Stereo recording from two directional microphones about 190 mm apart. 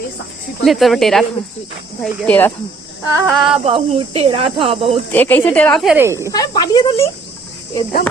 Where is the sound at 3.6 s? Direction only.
30° right (ahead or behind).